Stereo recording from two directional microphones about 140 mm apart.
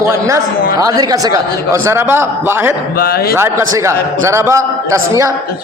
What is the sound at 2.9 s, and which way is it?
Speech, 90° left.